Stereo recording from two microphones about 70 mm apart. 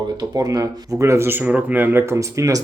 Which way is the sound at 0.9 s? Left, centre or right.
Right.